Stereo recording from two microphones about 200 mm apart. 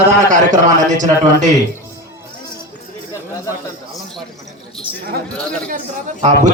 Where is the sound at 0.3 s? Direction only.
40° right (ahead or behind).